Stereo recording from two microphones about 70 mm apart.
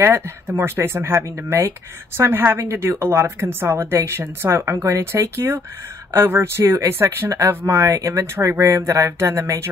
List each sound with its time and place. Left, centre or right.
0.0 s speech: right